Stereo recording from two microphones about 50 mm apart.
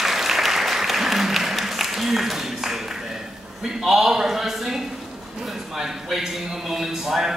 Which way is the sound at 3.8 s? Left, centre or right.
Centre.